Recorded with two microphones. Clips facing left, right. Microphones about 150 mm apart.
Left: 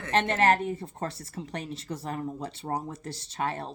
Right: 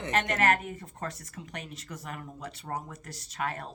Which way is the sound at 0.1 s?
30° left (ahead or behind).